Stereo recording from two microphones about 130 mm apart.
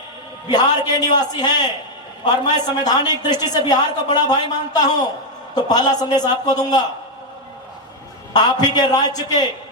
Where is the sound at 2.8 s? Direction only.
30° left (ahead or behind).